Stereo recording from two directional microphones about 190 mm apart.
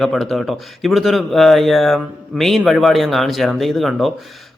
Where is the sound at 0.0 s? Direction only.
Centre (ahead or behind).